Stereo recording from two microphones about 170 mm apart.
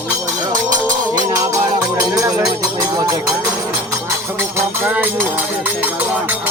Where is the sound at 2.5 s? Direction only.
20° right (ahead or behind).